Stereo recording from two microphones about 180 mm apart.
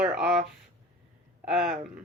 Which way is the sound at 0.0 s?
5° right (ahead or behind).